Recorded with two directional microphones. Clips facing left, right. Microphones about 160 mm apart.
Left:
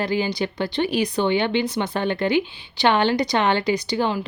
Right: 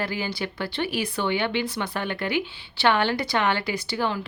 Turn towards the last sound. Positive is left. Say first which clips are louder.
# left 4 dB
turn(degrees=20)  # may be behind; listen again after turning